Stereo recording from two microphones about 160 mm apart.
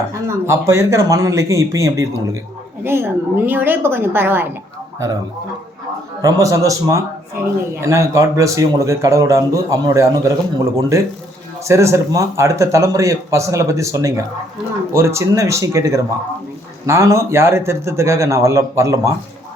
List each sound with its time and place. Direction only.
0.1 s a man's voice: 15° right (ahead or behind)
6.2 s a man's voice: 20° right (ahead or behind)